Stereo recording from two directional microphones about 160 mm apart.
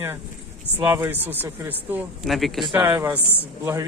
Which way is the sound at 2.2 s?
Centre (ahead or behind).